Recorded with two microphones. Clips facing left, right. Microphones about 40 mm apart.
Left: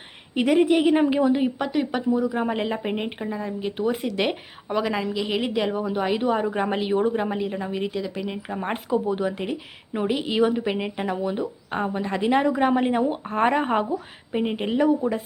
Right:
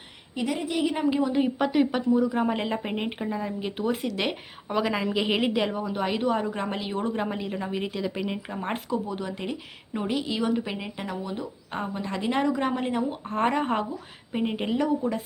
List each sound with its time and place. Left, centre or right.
0.3 s speech: left
1.1 s speech: centre
1.4 s speech: centre
5.1 s a woman's voice: centre
5.4 s speech: centre
8.9 s speech: centre